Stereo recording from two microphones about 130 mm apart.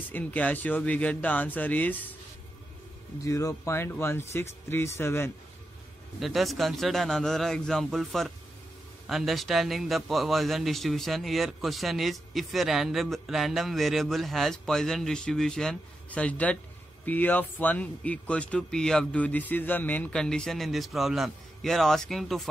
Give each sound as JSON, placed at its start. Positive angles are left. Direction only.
{"t": 0.1, "sound": "speech", "side_deg": 10}
{"t": 3.3, "sound": "speech", "side_deg": 25}
{"t": 6.1, "sound": "a man's voice", "side_deg": 0}